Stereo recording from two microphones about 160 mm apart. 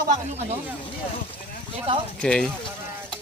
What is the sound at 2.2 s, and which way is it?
Speech, 5° left (ahead or behind).